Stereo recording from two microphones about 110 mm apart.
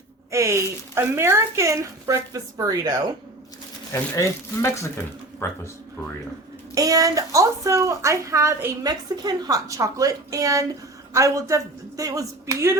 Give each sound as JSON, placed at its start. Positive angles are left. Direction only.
{"t": 0.3, "sound": "speech", "side_deg": -25}
{"t": 3.9, "sound": "speech", "side_deg": 25}
{"t": 6.7, "sound": "a woman's voice", "side_deg": -35}